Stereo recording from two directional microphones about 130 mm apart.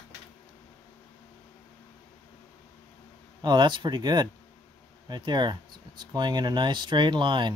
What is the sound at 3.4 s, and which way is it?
Speech, 35° right (ahead or behind).